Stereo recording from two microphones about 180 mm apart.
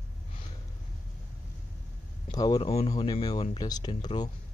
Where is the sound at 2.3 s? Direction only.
20° left (ahead or behind).